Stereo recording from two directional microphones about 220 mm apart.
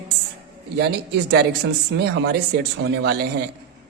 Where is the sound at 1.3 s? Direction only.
50° right (ahead or behind).